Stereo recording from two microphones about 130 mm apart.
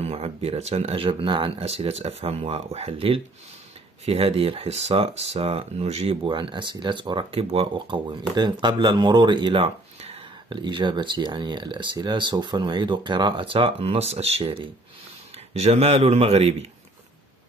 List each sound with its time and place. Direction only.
0.0 s speech: 55° right (ahead or behind)
6.2 s speech: 40° right (ahead or behind)
10.5 s speech: 35° right (ahead or behind)
14.4 s speech: 40° right (ahead or behind)
15.3 s speech: 55° right (ahead or behind)